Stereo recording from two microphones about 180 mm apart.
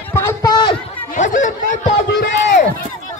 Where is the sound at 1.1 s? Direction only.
45° left (ahead or behind).